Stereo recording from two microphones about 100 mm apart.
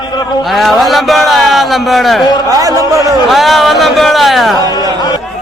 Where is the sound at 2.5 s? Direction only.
35° right (ahead or behind).